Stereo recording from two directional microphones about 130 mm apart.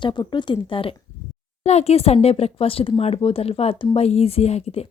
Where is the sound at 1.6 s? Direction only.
55° left (ahead or behind).